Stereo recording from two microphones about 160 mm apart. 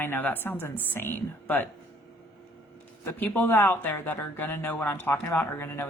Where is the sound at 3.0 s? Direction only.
15° left (ahead or behind).